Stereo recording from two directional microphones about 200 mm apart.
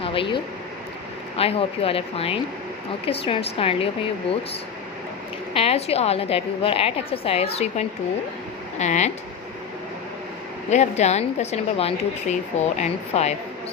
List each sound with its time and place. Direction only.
0.0 s a woman's voice: 25° left (ahead or behind)
5.5 s a woman's voice: 30° left (ahead or behind)
10.7 s a woman's voice: 35° left (ahead or behind)